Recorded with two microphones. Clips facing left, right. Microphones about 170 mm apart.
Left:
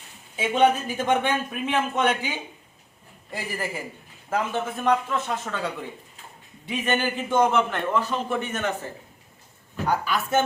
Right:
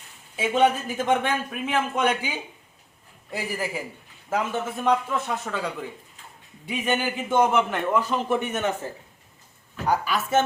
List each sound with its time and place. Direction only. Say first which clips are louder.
0.3 s speech: left 1 dB; 5° right (ahead or behind)
3.3 s speech: right 2 dB; 5° right (ahead or behind)
6.7 s speech: even; 10° right (ahead or behind)
9.8 s speech: right 1 dB; 10° right (ahead or behind)